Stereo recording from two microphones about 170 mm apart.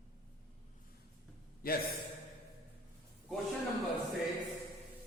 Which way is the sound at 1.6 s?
60° left (ahead or behind).